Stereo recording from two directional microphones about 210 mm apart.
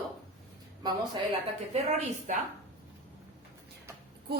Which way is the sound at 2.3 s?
35° right (ahead or behind).